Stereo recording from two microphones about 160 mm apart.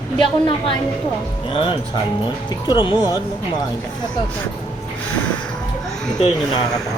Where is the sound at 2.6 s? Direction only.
30° left (ahead or behind).